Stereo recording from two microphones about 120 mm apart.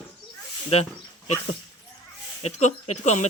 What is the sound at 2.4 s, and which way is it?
Speech, 65° left (ahead or behind).